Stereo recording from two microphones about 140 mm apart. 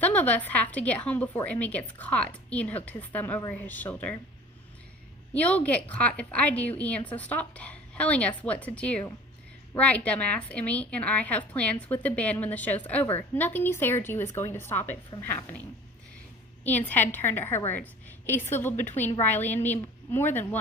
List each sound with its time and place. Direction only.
0.0 s a woman's voice: 10° left (ahead or behind)
5.3 s a woman's voice: 10° left (ahead or behind)
16.6 s a woman's voice: 10° left (ahead or behind)